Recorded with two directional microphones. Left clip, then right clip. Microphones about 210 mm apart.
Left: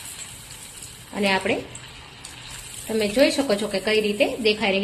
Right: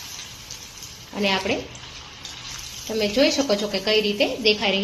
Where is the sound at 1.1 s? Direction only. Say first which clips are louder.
Left 1 dB; 10° left (ahead or behind).